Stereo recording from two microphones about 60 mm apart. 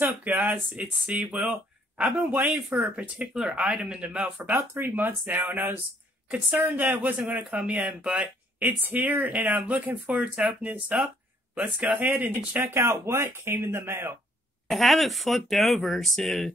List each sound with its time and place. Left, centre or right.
0.0 s speech: right
2.7 s speech: right
4.4 s speech: right
14.7 s speech: centre